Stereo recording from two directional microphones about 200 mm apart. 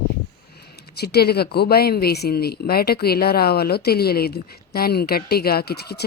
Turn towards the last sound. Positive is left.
turn(degrees=55)  # may be behind; listen again after turning